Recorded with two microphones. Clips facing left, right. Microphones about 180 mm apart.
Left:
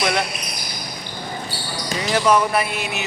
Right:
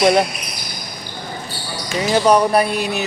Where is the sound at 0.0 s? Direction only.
30° right (ahead or behind).